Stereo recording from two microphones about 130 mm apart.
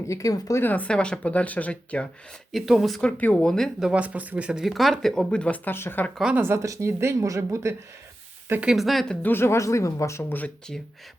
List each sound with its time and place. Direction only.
0.1 s speech: 25° left (ahead or behind); by 2.0 s 10° left (ahead or behind)
2.5 s speech: centre (ahead or behind); by 6.1 s 15° left (ahead or behind)
6.1 s speech: 5° right (ahead or behind)
6.4 s speech: 20° right (ahead or behind)
8.7 s speech: centre (ahead or behind)
9.2 s speech: 20° left (ahead or behind)